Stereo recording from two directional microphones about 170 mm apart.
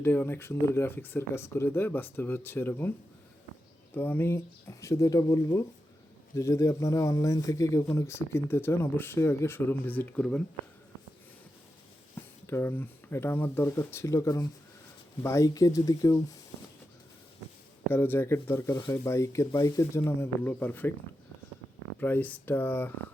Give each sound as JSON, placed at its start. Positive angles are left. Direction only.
{"t": 0.0, "sound": "speech", "side_deg": 15}
{"t": 3.9, "sound": "speech", "side_deg": 10}
{"t": 12.5, "sound": "speech", "side_deg": 15}
{"t": 17.9, "sound": "speech", "side_deg": 15}
{"t": 22.0, "sound": "speech", "side_deg": 10}